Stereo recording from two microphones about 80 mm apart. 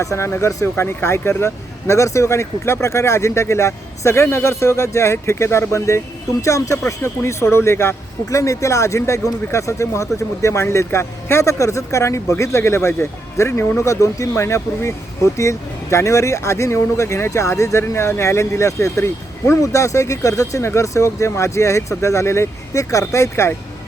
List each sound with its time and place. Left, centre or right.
0.0 s speech: left